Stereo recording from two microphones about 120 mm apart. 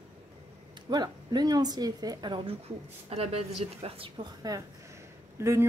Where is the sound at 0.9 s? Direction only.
35° right (ahead or behind).